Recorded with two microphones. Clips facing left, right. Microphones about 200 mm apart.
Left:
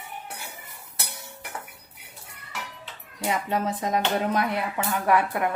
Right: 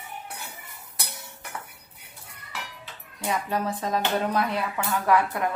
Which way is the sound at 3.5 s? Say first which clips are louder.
Left 2 dB; 20° left (ahead or behind).